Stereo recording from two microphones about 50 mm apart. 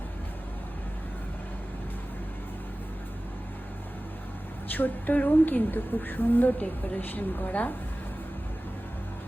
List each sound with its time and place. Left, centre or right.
4.7 s a woman's voice: left